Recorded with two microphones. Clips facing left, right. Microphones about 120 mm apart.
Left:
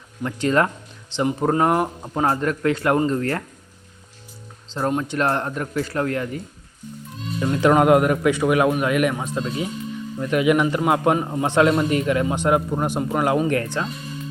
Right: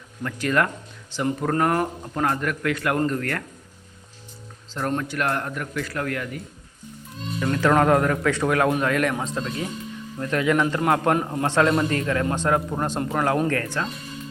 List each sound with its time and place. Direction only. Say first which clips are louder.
0.2 s a man's voice: left 3 dB; 25° left (ahead or behind)
2.2 s a man's voice: left 4 dB; 30° left (ahead or behind)
4.7 s a man's voice: left 3 dB; 20° left (ahead or behind)
7.3 s a man's voice: left 3 dB; 20° left (ahead or behind)
13.5 s a man's voice: left 3 dB; 20° left (ahead or behind)